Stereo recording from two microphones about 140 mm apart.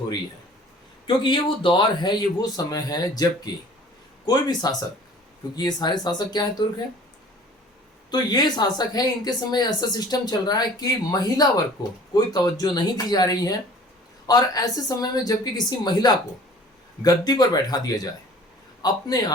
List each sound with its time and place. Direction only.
1.0 s a man's voice: 35° left (ahead or behind)
8.1 s speech: 30° left (ahead or behind)